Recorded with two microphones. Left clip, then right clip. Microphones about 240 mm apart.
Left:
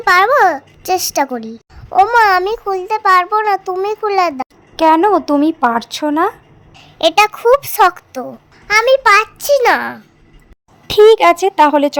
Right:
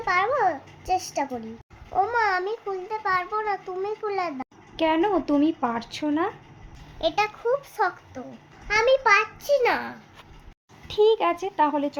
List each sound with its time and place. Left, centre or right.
0.0 s a child's voice: left
7.0 s a child's voice: left